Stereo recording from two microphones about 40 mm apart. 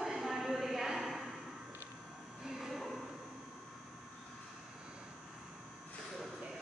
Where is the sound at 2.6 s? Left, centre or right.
Centre.